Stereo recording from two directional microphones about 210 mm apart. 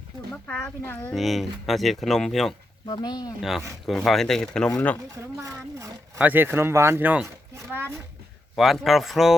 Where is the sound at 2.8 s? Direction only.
20° left (ahead or behind).